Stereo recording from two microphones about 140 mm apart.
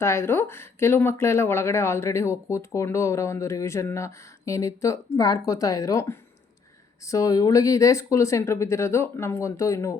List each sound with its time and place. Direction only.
0.0 s speech: 20° left (ahead or behind)